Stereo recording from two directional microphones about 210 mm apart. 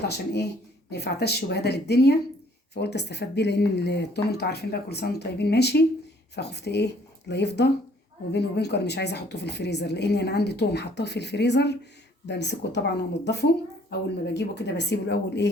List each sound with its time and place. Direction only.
0.9 s a woman's voice: 50° left (ahead or behind)